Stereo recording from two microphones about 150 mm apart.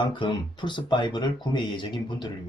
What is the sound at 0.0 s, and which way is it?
Speech, 30° left (ahead or behind).